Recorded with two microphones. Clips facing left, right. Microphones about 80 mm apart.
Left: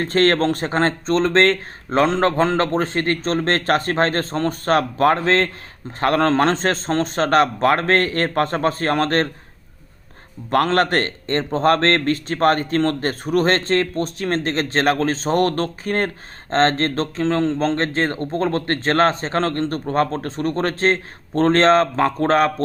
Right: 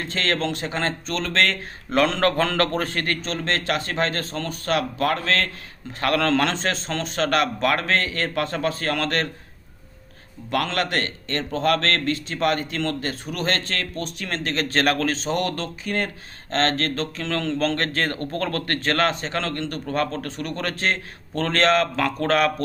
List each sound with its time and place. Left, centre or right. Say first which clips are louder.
0.0 s a man's voice: left 8 dB; left
10.5 s a man's voice: left 7 dB; left